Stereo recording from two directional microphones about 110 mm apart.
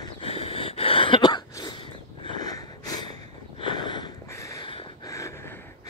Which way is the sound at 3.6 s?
45° left (ahead or behind).